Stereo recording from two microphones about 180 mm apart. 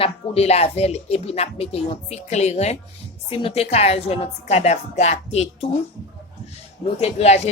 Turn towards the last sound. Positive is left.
turn(degrees=35)  # may be behind; listen again after turning